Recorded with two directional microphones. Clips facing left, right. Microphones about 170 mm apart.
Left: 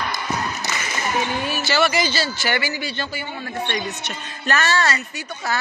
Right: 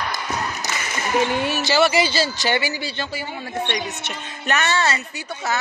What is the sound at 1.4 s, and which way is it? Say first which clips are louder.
Speech: right 3 dB; 75° right (ahead or behind).